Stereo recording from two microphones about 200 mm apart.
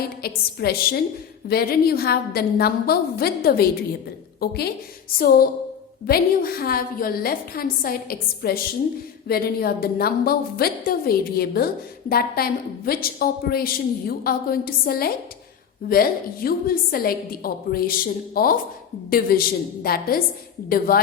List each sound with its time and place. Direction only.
0.2 s a woman's voice: 50° left (ahead or behind)